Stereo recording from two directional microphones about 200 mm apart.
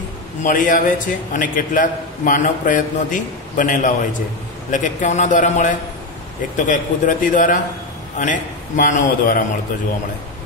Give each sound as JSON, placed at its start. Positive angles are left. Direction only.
{"t": 0.4, "sound": "a man's voice", "side_deg": 40}